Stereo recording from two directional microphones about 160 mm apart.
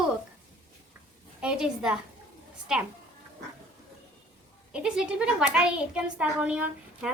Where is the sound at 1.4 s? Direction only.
5° right (ahead or behind).